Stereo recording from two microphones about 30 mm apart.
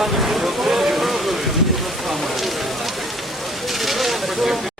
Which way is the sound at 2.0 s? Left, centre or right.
Centre.